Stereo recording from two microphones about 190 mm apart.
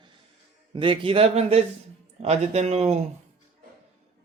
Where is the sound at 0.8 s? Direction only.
25° right (ahead or behind).